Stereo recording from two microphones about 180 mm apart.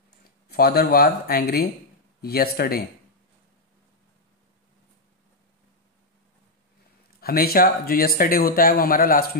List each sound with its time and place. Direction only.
0.5 s speech: 60° left (ahead or behind)
7.2 s speech: 55° left (ahead or behind)